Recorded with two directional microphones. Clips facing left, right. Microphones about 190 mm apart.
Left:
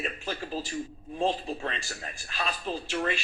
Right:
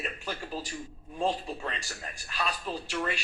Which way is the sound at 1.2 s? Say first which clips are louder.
Left 2 dB; 25° left (ahead or behind).